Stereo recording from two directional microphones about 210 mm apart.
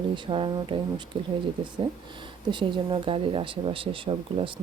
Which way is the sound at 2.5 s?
20° right (ahead or behind).